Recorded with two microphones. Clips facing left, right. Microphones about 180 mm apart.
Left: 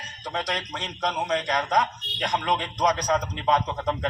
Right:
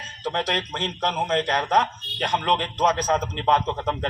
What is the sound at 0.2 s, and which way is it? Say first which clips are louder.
A man's voice: right 4 dB; 60° right (ahead or behind).